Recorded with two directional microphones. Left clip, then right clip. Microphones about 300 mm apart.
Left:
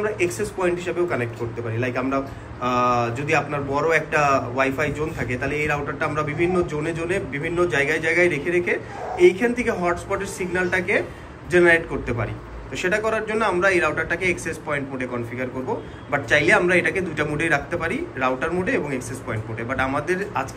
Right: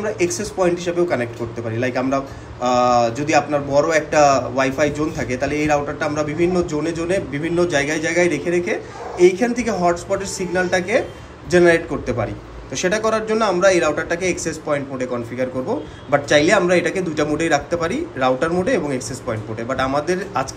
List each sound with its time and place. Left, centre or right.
0.0 s a man's voice: centre